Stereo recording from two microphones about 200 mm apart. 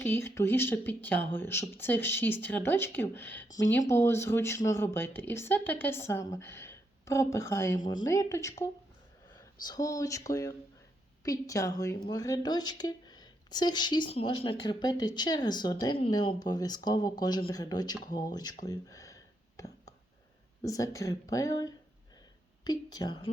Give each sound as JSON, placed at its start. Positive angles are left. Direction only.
{"t": 0.0, "sound": "a woman's voice", "side_deg": 10}
{"t": 20.6, "sound": "a woman's voice", "side_deg": 15}